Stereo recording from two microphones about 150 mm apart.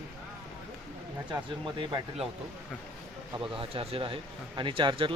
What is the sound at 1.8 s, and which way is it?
Speech, 35° right (ahead or behind).